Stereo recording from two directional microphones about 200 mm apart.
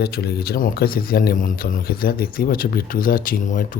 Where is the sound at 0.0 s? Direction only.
50° left (ahead or behind).